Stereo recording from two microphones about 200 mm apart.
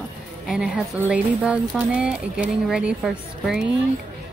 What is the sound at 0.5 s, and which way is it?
Speech, 5° right (ahead or behind).